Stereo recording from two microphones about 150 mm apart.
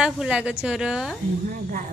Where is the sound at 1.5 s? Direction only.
70° right (ahead or behind).